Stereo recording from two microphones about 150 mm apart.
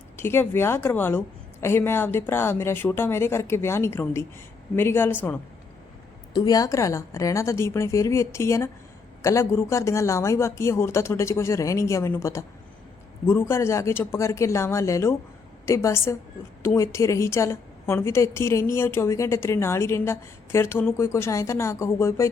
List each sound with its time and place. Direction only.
0.2 s a woman's voice: 15° left (ahead or behind)
6.3 s a woman's voice: 25° left (ahead or behind)